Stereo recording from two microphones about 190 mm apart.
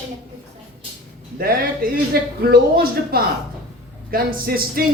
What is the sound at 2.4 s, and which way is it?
Speech, 55° right (ahead or behind).